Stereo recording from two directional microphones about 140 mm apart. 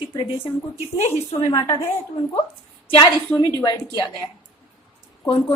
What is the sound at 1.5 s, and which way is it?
Speech, 30° left (ahead or behind).